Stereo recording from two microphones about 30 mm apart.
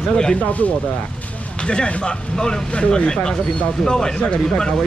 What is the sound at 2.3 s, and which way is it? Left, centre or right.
Speech, left.